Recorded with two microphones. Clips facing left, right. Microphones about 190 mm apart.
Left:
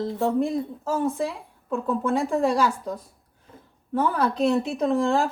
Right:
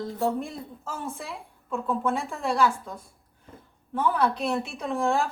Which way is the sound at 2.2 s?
40° left (ahead or behind).